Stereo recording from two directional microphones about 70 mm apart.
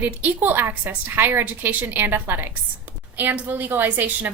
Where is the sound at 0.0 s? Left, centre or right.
Right.